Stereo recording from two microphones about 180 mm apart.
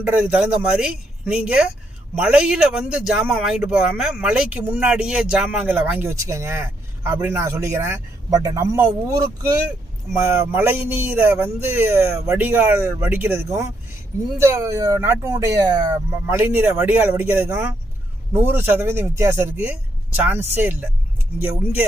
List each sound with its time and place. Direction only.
0.1 s a man's voice: 10° right (ahead or behind)
10.5 s speech: 10° right (ahead or behind)
16.2 s speech: 10° right (ahead or behind)